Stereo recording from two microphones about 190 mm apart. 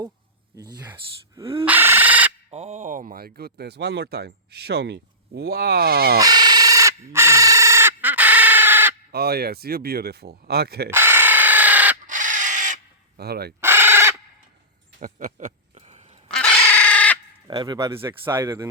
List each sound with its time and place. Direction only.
0.5 s speech: 20° right (ahead or behind)
1.6 s a sound: 10° right (ahead or behind)
2.5 s speech: 35° right (ahead or behind); by 6.1 s 55° right (ahead or behind)
6.1 s a sound: 20° right (ahead or behind)
9.1 s speech: 55° right (ahead or behind)
10.9 s tools: 10° right (ahead or behind)
12.0 s a sound: 40° right (ahead or behind)
13.1 s speech: 55° right (ahead or behind)
13.6 s owl: 10° right (ahead or behind)
15.0 s a sound: 45° right (ahead or behind)
16.3 s chicken: 5° left (ahead or behind)
17.5 s speech: 20° right (ahead or behind)